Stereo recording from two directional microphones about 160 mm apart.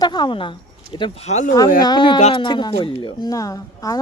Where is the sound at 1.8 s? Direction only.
30° left (ahead or behind).